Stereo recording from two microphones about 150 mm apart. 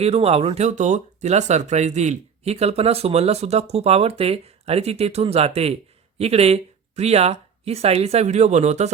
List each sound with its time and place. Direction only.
0.0 s speech: 45° right (ahead or behind)